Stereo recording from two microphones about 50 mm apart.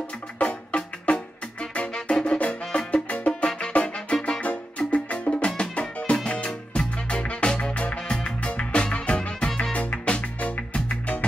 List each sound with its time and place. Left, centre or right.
0.4 s music: left
2.0 s music: centre
2.2 s music: left